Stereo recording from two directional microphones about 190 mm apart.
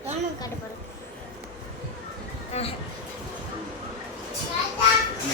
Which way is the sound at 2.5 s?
35° left (ahead or behind).